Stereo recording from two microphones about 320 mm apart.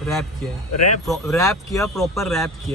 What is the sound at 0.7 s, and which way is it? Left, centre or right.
Speech, left.